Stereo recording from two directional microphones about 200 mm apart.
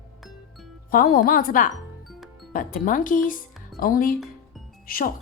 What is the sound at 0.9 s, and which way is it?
Speech, 45° left (ahead or behind).